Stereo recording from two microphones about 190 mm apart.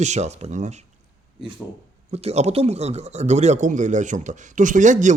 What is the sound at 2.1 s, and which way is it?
Speech, 35° right (ahead or behind).